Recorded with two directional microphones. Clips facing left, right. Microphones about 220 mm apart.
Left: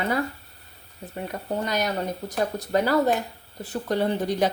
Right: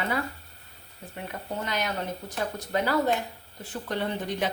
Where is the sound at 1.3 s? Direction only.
40° left (ahead or behind).